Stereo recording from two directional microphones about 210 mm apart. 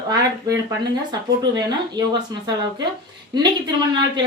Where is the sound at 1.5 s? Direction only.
20° right (ahead or behind).